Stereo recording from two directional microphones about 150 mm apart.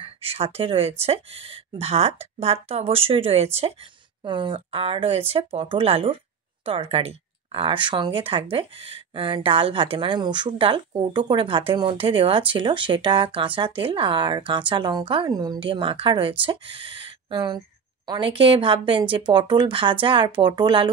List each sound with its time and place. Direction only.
0.0 s a woman's voice: 40° right (ahead or behind)